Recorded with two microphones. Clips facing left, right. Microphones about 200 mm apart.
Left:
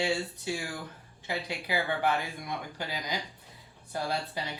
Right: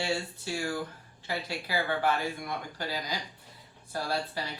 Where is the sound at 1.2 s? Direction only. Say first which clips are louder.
Left 1 dB; 20° left (ahead or behind).